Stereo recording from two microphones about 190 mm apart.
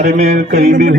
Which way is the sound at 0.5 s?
60° right (ahead or behind).